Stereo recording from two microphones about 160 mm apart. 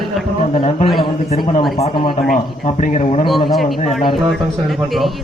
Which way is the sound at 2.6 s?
45° left (ahead or behind).